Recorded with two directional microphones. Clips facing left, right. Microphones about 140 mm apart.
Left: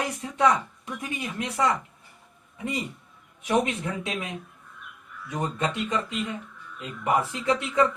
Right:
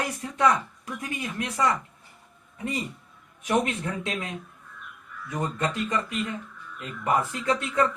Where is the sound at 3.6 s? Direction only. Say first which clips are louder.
Left 1 dB; 20° left (ahead or behind).